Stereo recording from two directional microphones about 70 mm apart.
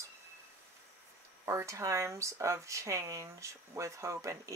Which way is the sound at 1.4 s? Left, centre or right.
Right.